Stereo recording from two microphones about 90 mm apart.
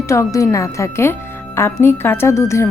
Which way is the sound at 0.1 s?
35° left (ahead or behind).